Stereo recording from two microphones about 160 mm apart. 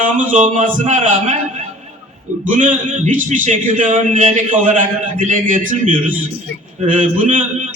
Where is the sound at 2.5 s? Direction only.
55° right (ahead or behind).